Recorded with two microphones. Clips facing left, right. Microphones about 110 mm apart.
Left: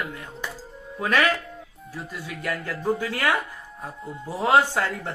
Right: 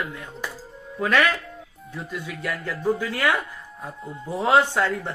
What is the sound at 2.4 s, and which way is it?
Speech, 50° left (ahead or behind).